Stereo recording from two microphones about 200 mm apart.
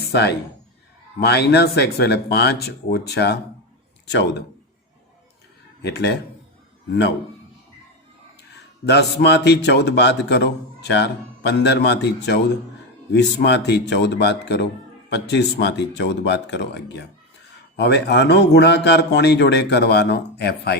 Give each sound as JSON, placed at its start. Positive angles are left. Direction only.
{"t": 0.1, "sound": "a man's voice", "side_deg": 55}
{"t": 5.8, "sound": "a man's voice", "side_deg": 55}
{"t": 8.9, "sound": "a man's voice", "side_deg": 55}